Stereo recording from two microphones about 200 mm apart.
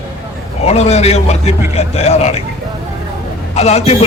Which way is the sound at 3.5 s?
35° left (ahead or behind).